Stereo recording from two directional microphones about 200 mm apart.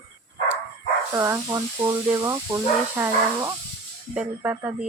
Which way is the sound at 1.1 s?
15° right (ahead or behind).